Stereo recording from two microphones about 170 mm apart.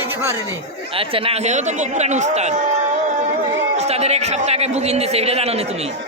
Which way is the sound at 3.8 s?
40° right (ahead or behind).